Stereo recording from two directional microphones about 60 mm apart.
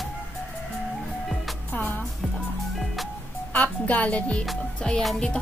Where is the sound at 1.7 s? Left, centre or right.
Left.